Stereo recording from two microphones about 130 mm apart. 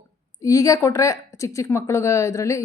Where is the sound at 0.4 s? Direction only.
25° left (ahead or behind).